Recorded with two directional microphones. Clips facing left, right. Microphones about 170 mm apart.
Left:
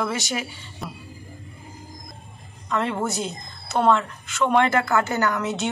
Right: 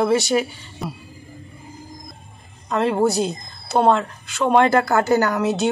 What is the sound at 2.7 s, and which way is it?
Speech, 35° right (ahead or behind).